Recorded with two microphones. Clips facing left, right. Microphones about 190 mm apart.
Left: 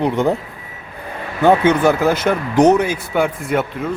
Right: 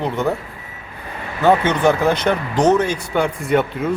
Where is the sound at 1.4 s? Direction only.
10° left (ahead or behind).